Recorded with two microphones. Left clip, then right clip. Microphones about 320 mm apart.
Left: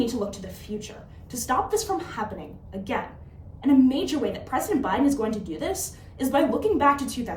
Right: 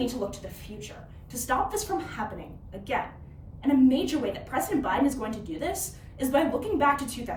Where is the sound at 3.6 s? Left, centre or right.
Centre.